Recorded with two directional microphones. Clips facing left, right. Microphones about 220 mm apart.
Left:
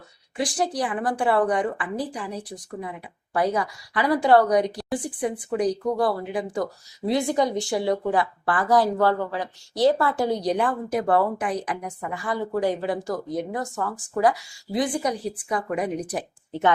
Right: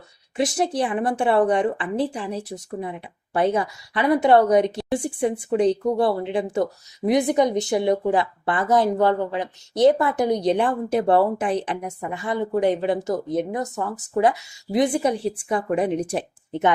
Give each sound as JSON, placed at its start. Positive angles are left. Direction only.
{"t": 0.3, "sound": "speech", "side_deg": -25}